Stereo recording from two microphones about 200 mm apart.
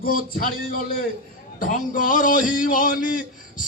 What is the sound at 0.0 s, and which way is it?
A man's voice, 45° left (ahead or behind).